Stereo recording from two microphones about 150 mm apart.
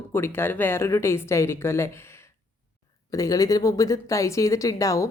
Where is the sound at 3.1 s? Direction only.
25° left (ahead or behind).